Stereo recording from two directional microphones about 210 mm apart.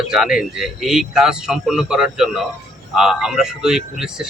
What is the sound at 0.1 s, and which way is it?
Speech, centre (ahead or behind).